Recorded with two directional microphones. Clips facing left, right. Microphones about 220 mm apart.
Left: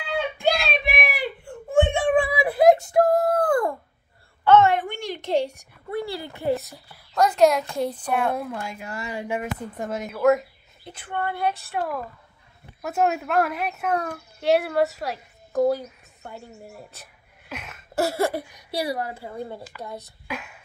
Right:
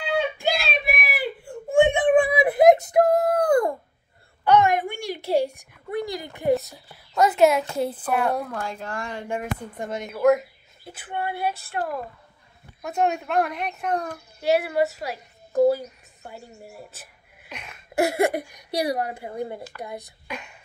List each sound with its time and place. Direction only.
0.4 s a sound: 5° right (ahead or behind)
6.5 s a woman's voice: centre (ahead or behind)
17.9 s a woman's voice: 15° right (ahead or behind)
20.2 s speech: 5° left (ahead or behind)